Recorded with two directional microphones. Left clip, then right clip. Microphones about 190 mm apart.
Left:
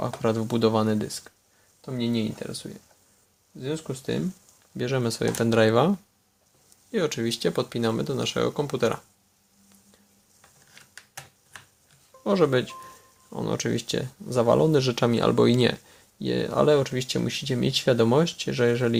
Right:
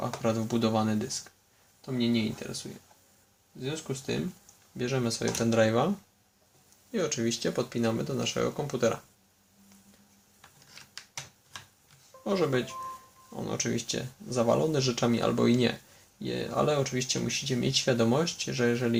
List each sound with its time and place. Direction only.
0.2 s speech: 45° left (ahead or behind)
3.6 s speech: 45° left (ahead or behind)
6.9 s speech: 40° left (ahead or behind)
12.2 s speech: 45° left (ahead or behind)